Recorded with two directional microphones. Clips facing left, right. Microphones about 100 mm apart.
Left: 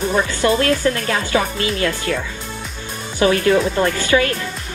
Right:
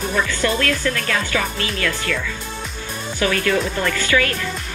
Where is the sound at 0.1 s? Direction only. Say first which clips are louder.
Left 3 dB; 25° left (ahead or behind).